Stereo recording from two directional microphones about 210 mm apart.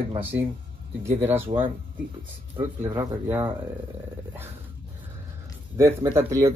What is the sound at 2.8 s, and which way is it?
Speech, 10° right (ahead or behind).